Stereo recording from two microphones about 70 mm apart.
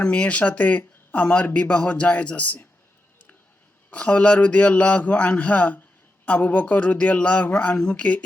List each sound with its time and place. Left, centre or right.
0.0 s speech: centre
3.8 s speech: centre